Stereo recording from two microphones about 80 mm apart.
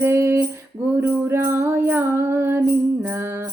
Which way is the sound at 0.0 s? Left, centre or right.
Right.